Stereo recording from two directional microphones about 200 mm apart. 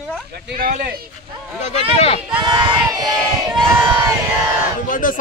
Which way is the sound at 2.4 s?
20° right (ahead or behind).